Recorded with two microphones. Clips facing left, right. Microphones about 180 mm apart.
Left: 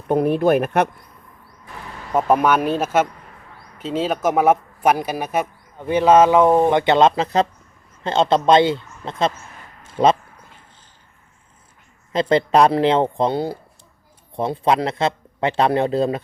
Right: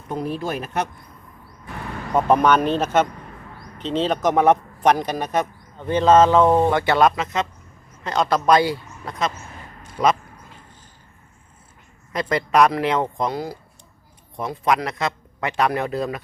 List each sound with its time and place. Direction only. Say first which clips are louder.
0.1 s speech: left 10 dB; 60° left (ahead or behind)
2.1 s speech: even; 5° left (ahead or behind); by 10.1 s 30° left (ahead or behind)
12.1 s speech: left 4 dB; 25° left (ahead or behind)